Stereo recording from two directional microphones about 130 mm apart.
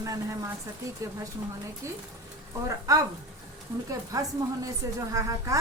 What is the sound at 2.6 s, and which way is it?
Speech, 25° right (ahead or behind).